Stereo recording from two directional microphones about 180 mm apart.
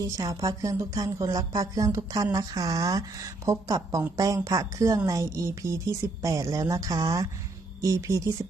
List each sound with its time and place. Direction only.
0.0 s a woman's voice: 20° right (ahead or behind)